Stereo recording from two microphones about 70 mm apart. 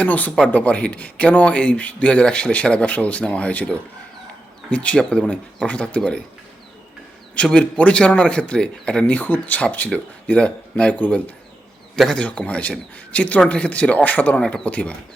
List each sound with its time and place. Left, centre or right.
0.0 s speech: left
7.5 s speech: centre